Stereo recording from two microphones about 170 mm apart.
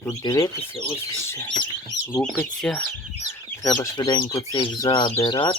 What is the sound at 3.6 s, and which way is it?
Speech, 20° left (ahead or behind).